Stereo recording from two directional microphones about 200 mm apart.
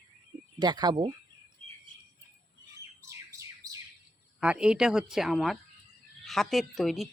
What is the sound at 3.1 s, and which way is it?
Bird, 15° right (ahead or behind).